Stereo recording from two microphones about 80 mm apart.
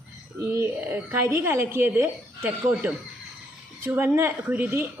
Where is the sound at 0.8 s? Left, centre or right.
Right.